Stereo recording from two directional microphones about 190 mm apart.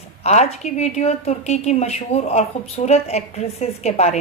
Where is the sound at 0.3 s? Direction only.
35° left (ahead or behind).